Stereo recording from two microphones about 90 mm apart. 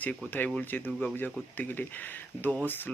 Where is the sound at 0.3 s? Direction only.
20° left (ahead or behind).